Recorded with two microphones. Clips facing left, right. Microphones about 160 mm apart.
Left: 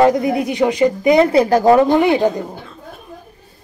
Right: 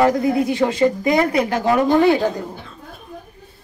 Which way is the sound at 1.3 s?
35° left (ahead or behind).